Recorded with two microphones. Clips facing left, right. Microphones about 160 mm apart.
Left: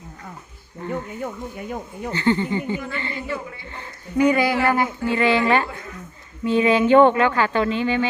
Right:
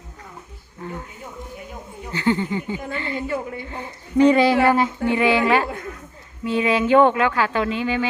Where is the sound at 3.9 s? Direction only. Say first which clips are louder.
Right 3 dB; 25° right (ahead or behind).